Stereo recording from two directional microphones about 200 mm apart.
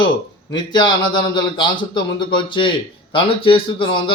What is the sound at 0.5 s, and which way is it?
Speech, 20° left (ahead or behind).